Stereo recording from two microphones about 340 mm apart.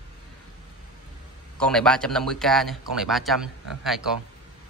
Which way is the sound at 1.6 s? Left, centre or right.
Centre.